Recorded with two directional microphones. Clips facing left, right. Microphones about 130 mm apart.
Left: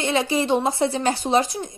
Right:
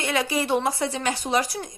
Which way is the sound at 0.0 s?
25° left (ahead or behind).